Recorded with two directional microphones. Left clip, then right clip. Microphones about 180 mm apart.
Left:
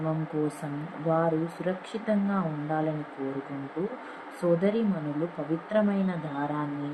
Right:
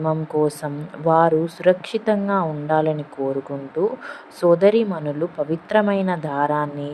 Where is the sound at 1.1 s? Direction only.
70° right (ahead or behind).